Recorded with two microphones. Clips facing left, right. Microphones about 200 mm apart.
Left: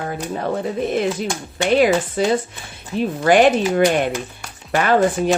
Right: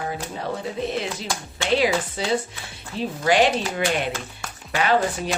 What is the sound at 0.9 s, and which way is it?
Speech, 50° left (ahead or behind).